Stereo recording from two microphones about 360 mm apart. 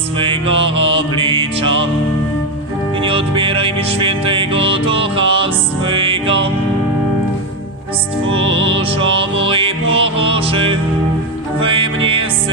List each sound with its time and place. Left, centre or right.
0.2 s music: centre
3.0 s music: centre
8.3 s music: right
9.5 s music: centre